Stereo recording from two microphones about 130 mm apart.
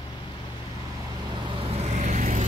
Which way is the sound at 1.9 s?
70° right (ahead or behind).